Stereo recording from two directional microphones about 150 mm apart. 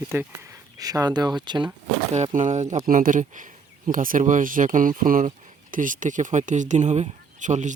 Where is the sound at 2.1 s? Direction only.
50° right (ahead or behind).